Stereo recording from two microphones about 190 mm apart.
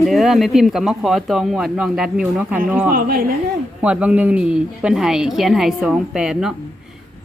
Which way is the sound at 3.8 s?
5° right (ahead or behind).